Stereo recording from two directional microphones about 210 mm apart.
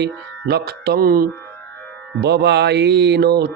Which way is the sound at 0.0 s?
50° right (ahead or behind).